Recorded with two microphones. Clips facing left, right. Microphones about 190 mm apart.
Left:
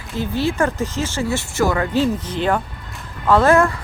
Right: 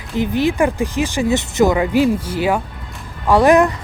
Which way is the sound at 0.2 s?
15° right (ahead or behind).